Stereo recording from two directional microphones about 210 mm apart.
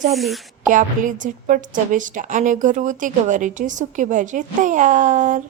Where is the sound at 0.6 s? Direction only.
40° right (ahead or behind).